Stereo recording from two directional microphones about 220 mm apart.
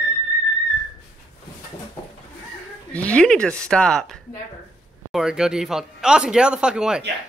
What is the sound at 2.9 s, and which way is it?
A man's voice, 5° left (ahead or behind).